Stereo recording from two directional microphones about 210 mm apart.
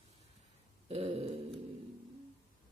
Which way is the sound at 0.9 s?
30° right (ahead or behind).